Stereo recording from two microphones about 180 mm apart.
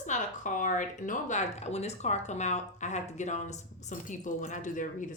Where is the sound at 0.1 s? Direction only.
45° left (ahead or behind).